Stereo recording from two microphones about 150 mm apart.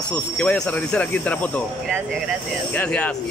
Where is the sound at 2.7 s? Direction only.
10° left (ahead or behind).